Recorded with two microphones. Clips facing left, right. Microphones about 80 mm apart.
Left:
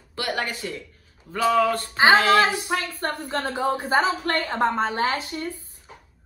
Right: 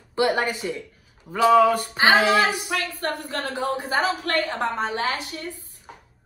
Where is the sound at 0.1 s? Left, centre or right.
Right.